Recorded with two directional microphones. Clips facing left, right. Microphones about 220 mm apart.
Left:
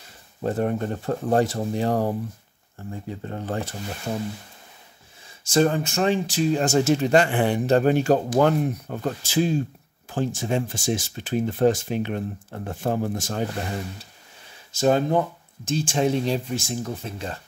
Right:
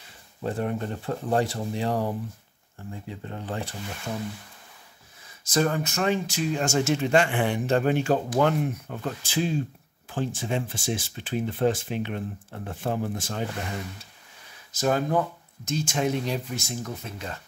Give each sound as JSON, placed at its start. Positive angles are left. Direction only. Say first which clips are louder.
{"t": 0.4, "sound": "speech", "louder": "left 4 dB", "side_deg": 40}
{"t": 5.4, "sound": "speech", "louder": "left 4 dB", "side_deg": 30}